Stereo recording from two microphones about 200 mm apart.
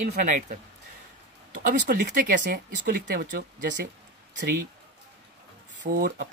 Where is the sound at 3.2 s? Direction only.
50° right (ahead or behind).